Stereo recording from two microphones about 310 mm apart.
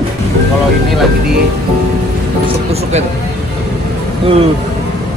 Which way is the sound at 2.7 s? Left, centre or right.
Right.